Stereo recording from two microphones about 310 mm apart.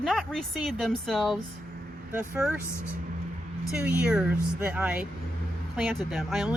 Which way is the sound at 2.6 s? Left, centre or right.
Centre.